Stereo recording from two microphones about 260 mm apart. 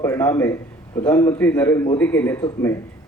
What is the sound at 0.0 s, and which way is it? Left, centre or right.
A man's voice, centre.